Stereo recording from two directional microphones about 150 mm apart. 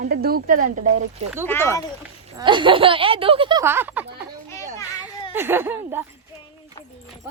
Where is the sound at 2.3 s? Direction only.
30° right (ahead or behind).